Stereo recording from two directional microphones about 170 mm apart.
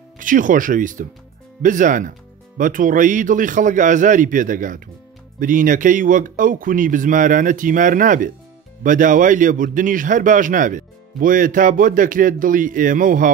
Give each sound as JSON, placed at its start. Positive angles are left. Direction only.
{"t": 0.2, "sound": "a man's voice", "side_deg": -50}